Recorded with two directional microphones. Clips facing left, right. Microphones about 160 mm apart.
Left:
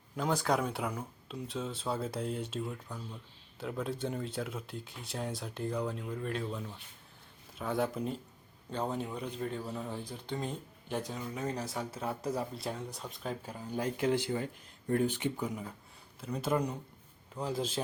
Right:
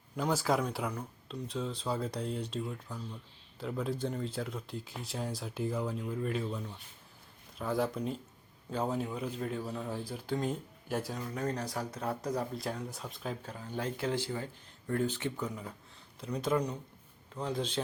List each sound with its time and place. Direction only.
0.2 s speech: centre (ahead or behind)
13.4 s speech: 10° left (ahead or behind)